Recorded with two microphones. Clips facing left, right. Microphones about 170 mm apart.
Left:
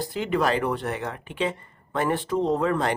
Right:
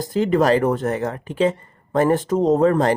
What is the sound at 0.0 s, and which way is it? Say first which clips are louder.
Speech: right 7 dB; 40° right (ahead or behind).